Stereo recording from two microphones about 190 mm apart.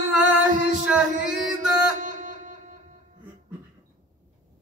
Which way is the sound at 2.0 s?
40° right (ahead or behind).